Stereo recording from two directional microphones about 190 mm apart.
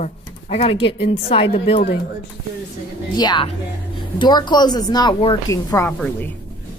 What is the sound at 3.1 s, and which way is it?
A woman's voice, 25° left (ahead or behind).